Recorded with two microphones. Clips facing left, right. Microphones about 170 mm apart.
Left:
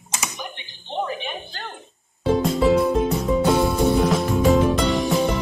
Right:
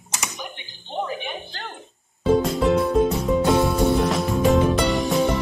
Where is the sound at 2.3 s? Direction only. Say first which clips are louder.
Left 1 dB; centre (ahead or behind).